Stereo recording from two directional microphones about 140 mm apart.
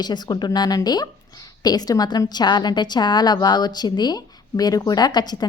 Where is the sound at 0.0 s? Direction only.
30° left (ahead or behind).